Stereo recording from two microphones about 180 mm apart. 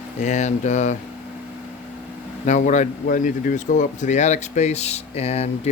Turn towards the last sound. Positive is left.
turn(degrees=35)  # may be behind; listen again after turning